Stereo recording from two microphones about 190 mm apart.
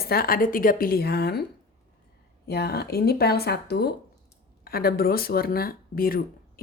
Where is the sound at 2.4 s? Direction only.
55° left (ahead or behind).